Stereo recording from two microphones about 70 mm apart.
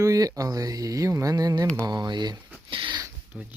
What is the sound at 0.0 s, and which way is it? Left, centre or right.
Speech, right.